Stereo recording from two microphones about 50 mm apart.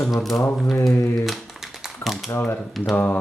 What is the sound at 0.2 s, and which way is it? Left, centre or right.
Speech, centre.